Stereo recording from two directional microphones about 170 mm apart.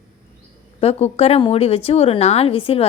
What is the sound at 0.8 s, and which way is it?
Speech, 40° left (ahead or behind).